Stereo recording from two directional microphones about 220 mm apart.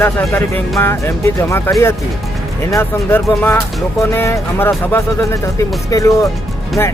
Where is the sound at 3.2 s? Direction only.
Centre (ahead or behind).